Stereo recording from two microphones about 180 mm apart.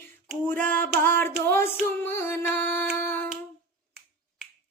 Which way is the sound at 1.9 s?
15° left (ahead or behind).